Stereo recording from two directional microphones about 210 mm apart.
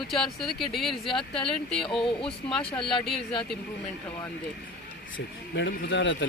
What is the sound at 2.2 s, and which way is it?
Speech, 5° left (ahead or behind).